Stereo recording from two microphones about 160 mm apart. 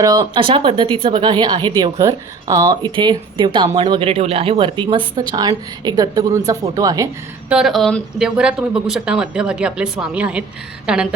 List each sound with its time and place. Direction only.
0.0 s a woman's voice: 25° right (ahead or behind)
7.5 s speech: centre (ahead or behind)